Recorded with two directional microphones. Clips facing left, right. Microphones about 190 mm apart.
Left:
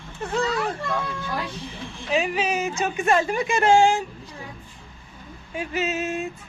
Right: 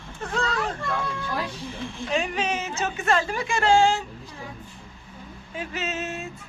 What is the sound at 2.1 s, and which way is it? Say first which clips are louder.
A woman's voice: left 3 dB; 5° left (ahead or behind).